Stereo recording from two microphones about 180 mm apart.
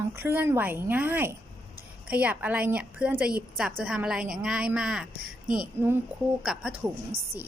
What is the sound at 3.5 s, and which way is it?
A woman's voice, 5° right (ahead or behind).